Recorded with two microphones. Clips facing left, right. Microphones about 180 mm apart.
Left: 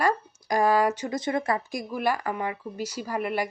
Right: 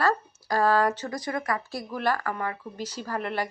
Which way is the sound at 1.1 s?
25° left (ahead or behind).